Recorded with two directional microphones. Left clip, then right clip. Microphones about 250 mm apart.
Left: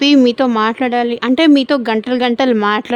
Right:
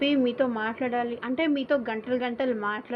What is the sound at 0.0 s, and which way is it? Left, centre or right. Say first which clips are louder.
Speech: left 13 dB; left.